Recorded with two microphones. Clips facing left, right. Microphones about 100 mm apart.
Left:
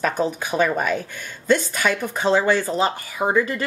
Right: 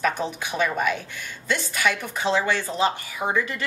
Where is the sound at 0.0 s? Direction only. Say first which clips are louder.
Left 3 dB; 40° left (ahead or behind).